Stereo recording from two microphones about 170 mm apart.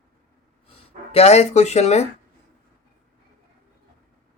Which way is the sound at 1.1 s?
40° left (ahead or behind).